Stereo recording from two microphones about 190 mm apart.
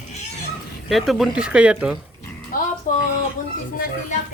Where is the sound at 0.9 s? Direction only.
Centre (ahead or behind).